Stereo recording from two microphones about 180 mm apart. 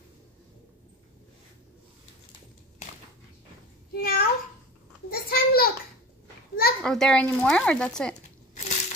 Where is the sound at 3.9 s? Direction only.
55° left (ahead or behind).